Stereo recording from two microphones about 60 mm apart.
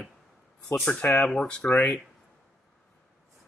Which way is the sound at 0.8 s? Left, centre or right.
Left.